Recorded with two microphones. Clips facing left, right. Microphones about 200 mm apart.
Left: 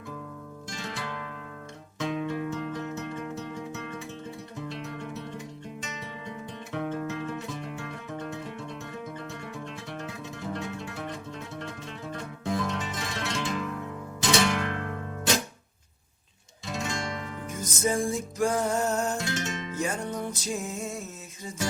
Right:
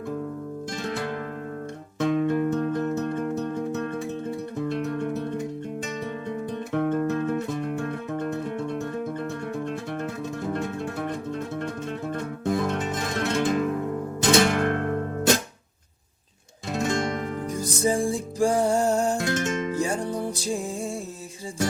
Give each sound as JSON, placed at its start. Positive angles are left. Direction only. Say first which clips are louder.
{"t": 0.8, "sound": "music", "louder": "right 7 dB", "side_deg": -50}
{"t": 6.7, "sound": "music", "louder": "right 7 dB", "side_deg": -50}
{"t": 16.7, "sound": "music", "louder": "right 8 dB", "side_deg": -55}
{"t": 17.6, "sound": "music", "louder": "right 3 dB", "side_deg": -30}
{"t": 19.2, "sound": "music", "louder": "right 7 dB", "side_deg": -50}
{"t": 19.7, "sound": "music", "louder": "right 5 dB", "side_deg": -35}